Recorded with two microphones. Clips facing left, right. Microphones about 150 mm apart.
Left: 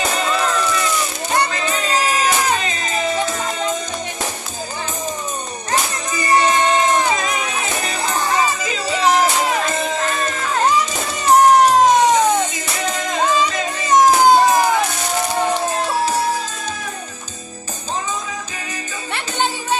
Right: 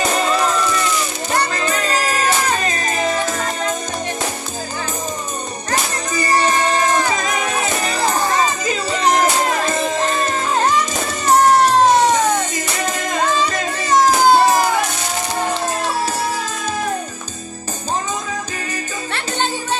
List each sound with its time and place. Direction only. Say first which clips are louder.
2.6 s music: right 2 dB; 45° right (ahead or behind)
7.3 s music: right 3 dB; 45° right (ahead or behind)
9.6 s music: right 2 dB; 35° right (ahead or behind)
11.3 s cat: left 2 dB; 15° left (ahead or behind)
13.8 s music: left 1 dB; 20° left (ahead or behind)